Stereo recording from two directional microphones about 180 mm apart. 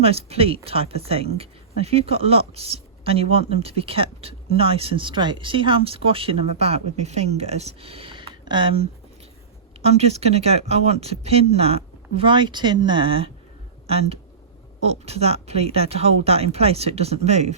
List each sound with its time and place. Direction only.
0.0 s speech: 35° right (ahead or behind)